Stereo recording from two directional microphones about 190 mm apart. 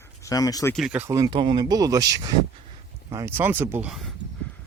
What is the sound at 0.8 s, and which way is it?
Speech, 5° right (ahead or behind).